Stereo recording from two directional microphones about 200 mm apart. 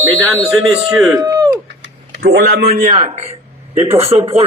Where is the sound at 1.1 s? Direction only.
20° right (ahead or behind).